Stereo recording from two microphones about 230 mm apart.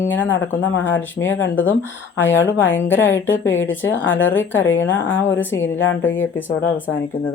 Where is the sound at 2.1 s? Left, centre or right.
Left.